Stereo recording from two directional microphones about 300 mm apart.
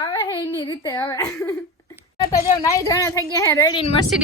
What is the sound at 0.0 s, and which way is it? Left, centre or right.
A woman's voice, centre.